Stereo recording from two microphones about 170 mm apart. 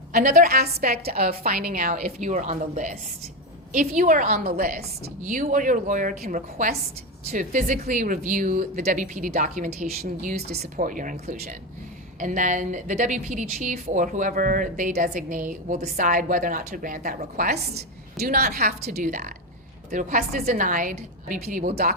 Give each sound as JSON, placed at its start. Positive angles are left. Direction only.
{"t": 0.1, "sound": "a woman's voice", "side_deg": -55}
{"t": 5.2, "sound": "a woman's voice", "side_deg": -50}